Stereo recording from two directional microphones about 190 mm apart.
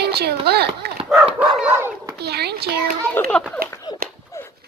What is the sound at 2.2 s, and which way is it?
Speech, 60° right (ahead or behind).